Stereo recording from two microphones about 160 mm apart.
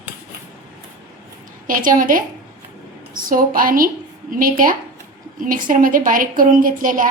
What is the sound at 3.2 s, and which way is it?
A woman's voice, 60° right (ahead or behind).